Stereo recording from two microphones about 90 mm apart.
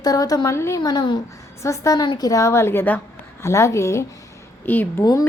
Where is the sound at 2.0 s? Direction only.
55° left (ahead or behind).